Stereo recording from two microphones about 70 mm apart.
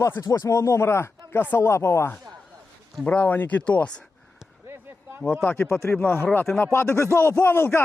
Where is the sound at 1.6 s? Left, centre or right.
Left.